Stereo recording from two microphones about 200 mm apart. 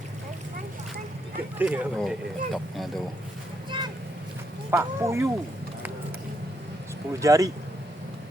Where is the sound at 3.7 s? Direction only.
25° right (ahead or behind).